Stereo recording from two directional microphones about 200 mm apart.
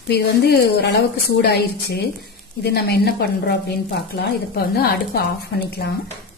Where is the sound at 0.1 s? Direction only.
55° left (ahead or behind).